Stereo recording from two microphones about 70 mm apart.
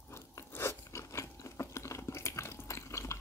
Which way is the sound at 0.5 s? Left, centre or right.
Left.